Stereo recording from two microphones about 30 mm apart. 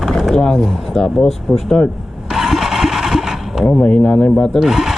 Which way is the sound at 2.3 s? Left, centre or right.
Centre.